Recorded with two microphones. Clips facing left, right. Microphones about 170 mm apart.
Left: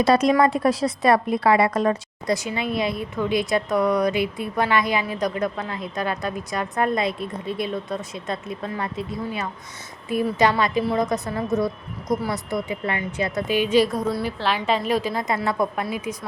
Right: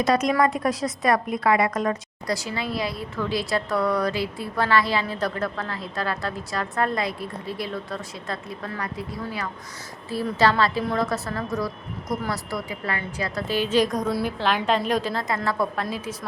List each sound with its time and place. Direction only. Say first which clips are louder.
0.0 s a woman's voice: left 3 dB; 30° left (ahead or behind); by 15.2 s 5° left (ahead or behind)
15.4 s a woman's voice: left 2 dB; 15° left (ahead or behind)